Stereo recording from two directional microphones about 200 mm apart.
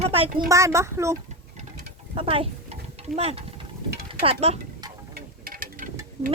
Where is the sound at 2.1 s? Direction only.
25° right (ahead or behind).